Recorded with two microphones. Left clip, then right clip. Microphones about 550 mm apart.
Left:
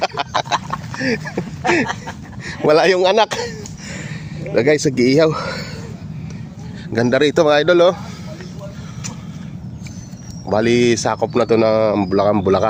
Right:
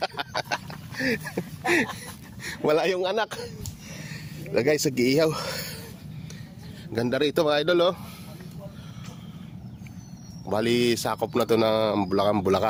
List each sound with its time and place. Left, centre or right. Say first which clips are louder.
0.0 s a sound: left 10 dB; right
2.4 s speech: left 10 dB; right
4.5 s speech: left 8 dB; right
6.9 s speech: left 10 dB; right
10.4 s speech: left 9 dB; right